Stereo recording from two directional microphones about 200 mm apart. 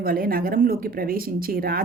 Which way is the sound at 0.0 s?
45° right (ahead or behind).